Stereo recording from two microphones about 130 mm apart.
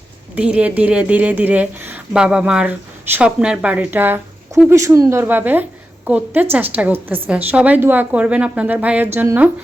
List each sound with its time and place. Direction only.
0.3 s a woman's voice: 10° right (ahead or behind)